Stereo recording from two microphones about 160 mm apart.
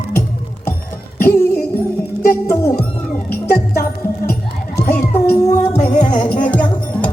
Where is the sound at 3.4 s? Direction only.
75° left (ahead or behind).